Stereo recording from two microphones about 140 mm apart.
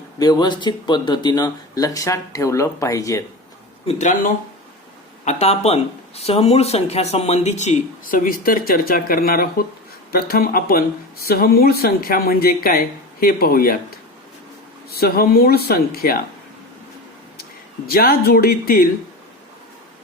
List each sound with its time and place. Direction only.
0.2 s speech: 30° left (ahead or behind)
3.8 s speech: 60° left (ahead or behind); by 13.7 s 90° left
14.9 s speech: 90° left
17.8 s speech: 90° left